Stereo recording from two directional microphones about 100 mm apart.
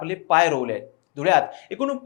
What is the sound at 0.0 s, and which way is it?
Speech, 15° left (ahead or behind).